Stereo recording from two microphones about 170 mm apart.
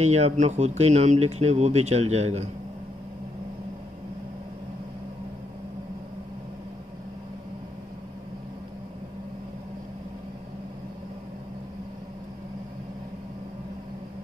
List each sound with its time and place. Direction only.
0.0 s speech: 40° right (ahead or behind)